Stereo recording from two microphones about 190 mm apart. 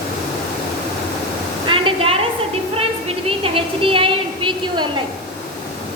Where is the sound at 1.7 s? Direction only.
30° right (ahead or behind).